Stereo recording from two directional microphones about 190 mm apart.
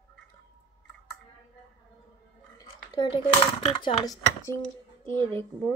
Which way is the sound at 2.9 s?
25° left (ahead or behind).